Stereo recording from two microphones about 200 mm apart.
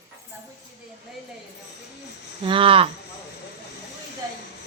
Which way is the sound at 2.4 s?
25° right (ahead or behind).